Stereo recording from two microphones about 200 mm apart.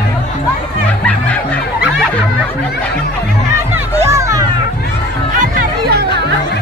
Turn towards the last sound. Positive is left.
turn(degrees=-50)  # may be behind; listen again after turning